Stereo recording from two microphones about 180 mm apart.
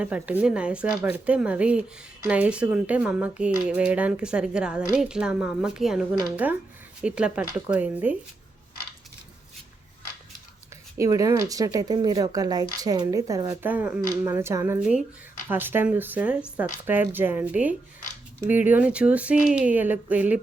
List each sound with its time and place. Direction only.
0.0 s speech: 5° right (ahead or behind)
10.9 s speech: 15° right (ahead or behind)